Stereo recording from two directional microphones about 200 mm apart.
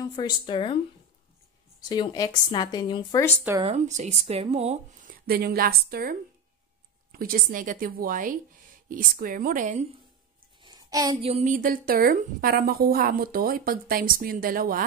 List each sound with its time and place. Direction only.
0.1 s speech: 25° left (ahead or behind)
1.9 s speech: 20° left (ahead or behind)
3.6 s speech: 35° right (ahead or behind)
5.1 s a woman's voice: 50° right (ahead or behind)
10.6 s a sound: 20° right (ahead or behind)
11.1 s a woman's voice: 30° right (ahead or behind)